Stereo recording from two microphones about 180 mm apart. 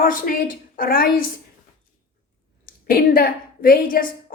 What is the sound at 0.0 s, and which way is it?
A woman's voice, 50° left (ahead or behind).